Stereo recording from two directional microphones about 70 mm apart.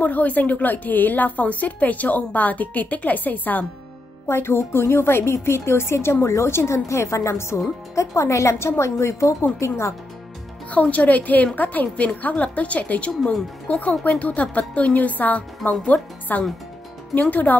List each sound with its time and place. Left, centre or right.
0.0 s a woman's voice: left
4.3 s a woman's voice: left
10.7 s a woman's voice: centre